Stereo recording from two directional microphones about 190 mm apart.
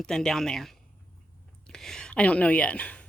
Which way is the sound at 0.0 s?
Centre (ahead or behind).